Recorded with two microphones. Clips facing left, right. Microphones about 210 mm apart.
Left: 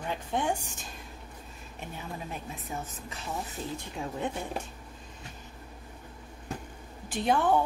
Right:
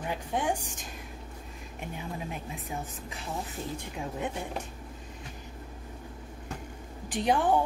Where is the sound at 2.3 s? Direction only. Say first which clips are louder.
Right 1 dB; 15° right (ahead or behind).